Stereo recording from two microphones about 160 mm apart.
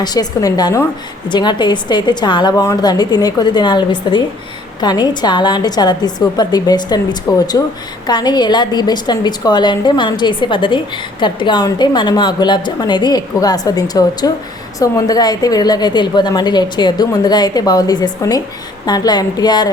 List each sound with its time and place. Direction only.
0.0 s a woman's voice: 25° left (ahead or behind)